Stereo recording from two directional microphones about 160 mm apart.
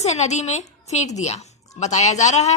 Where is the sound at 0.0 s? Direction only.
45° left (ahead or behind).